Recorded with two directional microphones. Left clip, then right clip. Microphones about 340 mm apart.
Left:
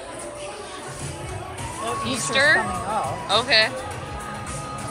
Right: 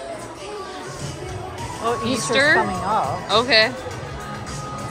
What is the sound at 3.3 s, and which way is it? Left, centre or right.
Speech, centre.